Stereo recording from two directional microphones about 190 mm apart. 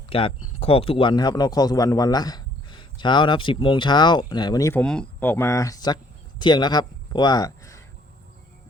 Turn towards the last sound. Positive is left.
turn(degrees=20)  # may be behind; listen again after turning